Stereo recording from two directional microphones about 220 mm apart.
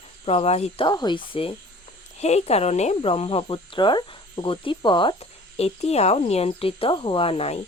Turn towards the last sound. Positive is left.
turn(degrees=25)  # may be behind; listen again after turning